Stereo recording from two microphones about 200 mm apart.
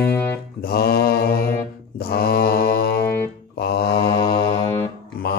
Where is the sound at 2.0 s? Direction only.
50° left (ahead or behind).